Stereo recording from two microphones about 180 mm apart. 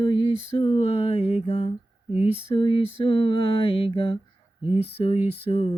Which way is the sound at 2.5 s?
30° left (ahead or behind).